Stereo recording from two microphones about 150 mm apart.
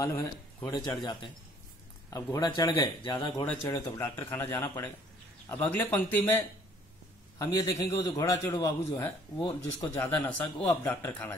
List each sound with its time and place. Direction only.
0.0 s a man's voice: 20° left (ahead or behind)
2.3 s speech: 25° left (ahead or behind)
3.7 s a man's voice: 20° left (ahead or behind)
9.5 s a man's voice: 15° left (ahead or behind)